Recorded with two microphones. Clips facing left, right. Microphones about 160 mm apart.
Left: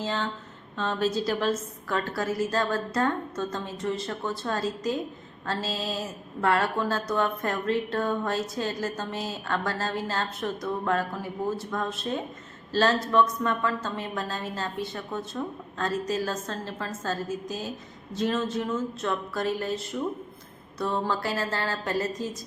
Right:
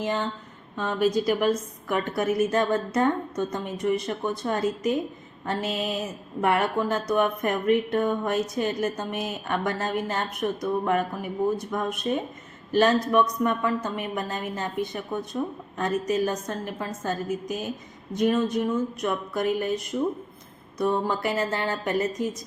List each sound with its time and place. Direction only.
0.0 s a woman's voice: 15° right (ahead or behind)